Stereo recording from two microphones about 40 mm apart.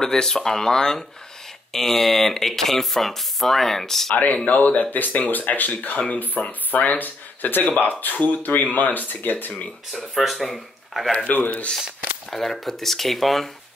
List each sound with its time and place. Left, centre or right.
0.0 s speech: centre
4.5 s speech: left
9.9 s speech: centre
11.2 s speech: left
12.3 s speech: centre